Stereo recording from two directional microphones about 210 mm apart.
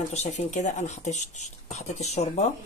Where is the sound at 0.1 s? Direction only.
30° left (ahead or behind).